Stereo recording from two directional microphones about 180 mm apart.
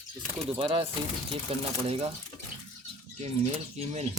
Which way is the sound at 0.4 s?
30° right (ahead or behind).